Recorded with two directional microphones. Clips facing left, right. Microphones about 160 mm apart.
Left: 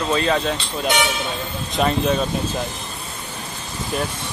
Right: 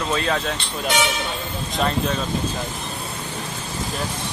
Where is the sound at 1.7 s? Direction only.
5° left (ahead or behind).